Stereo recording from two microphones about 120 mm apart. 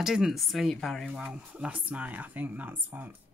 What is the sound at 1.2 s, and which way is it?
Speech, 10° right (ahead or behind).